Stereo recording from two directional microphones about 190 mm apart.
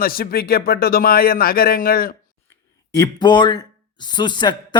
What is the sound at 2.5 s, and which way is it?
Speech, 20° left (ahead or behind).